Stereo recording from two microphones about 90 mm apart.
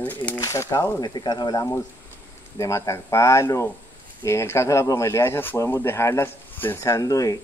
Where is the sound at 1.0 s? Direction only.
50° left (ahead or behind).